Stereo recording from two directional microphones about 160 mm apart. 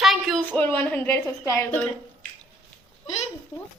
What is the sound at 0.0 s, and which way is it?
A woman's voice, centre (ahead or behind).